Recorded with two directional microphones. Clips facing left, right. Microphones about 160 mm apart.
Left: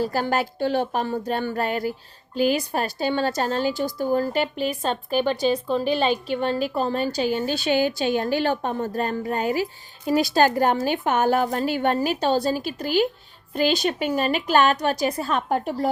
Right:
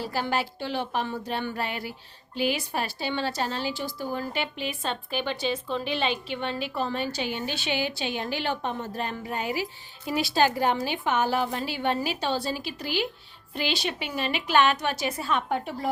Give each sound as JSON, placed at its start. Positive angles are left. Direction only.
{"t": 0.0, "sound": "a woman's voice", "side_deg": 45}